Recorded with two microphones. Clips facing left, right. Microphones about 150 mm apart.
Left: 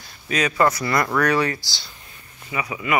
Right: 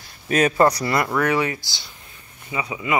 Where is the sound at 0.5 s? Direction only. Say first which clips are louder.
Right 2 dB; 35° right (ahead or behind).